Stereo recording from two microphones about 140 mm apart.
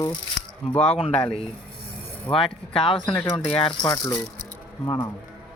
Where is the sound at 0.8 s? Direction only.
45° left (ahead or behind).